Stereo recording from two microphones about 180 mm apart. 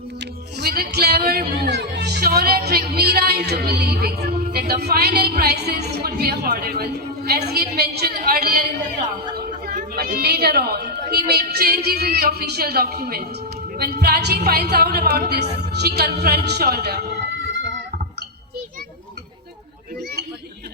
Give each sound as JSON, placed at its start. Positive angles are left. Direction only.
{"t": 0.7, "sound": "music", "side_deg": -60}
{"t": 4.5, "sound": "a woman's voice", "side_deg": -60}
{"t": 9.6, "sound": "a woman's voice", "side_deg": -55}